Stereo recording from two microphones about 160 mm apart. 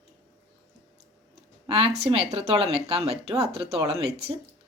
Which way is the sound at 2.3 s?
40° right (ahead or behind).